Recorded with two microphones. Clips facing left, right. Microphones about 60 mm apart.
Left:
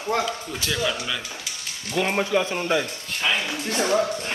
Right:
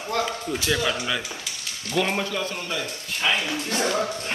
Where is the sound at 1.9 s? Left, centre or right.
Centre.